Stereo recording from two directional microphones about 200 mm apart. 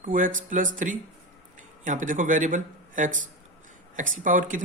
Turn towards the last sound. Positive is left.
turn(degrees=-40)  # may be behind; listen again after turning